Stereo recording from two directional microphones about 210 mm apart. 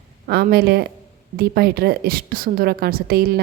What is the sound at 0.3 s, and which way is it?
A woman's voice, 50° right (ahead or behind).